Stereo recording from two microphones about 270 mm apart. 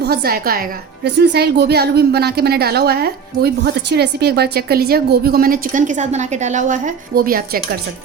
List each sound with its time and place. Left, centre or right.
0.0 s a woman's voice: right